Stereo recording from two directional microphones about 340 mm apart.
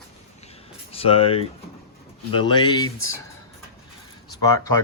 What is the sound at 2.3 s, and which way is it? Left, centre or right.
Speech, centre.